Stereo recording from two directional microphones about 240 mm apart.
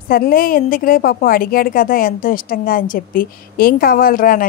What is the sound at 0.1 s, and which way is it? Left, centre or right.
A woman's voice, left.